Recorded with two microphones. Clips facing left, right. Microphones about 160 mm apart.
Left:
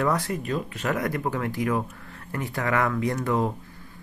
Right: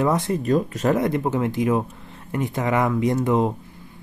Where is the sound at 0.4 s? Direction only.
40° right (ahead or behind).